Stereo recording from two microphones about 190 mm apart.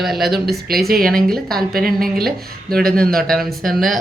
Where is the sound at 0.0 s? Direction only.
Centre (ahead or behind).